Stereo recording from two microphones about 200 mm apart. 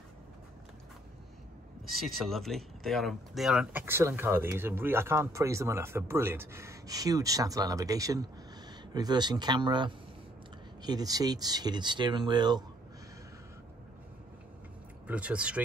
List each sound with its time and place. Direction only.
1.9 s speech: centre (ahead or behind); by 12.6 s 20° right (ahead or behind)
15.0 s speech: 5° right (ahead or behind)